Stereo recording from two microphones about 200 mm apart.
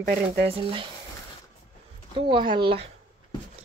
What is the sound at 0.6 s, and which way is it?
Speech, 25° right (ahead or behind).